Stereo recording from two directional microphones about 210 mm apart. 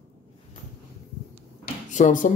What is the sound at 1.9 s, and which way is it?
Speech, 35° left (ahead or behind).